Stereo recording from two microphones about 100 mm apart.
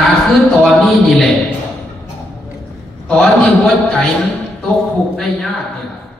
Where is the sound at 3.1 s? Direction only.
5° left (ahead or behind).